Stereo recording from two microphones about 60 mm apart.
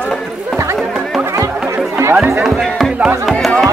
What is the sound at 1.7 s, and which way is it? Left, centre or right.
Music, right.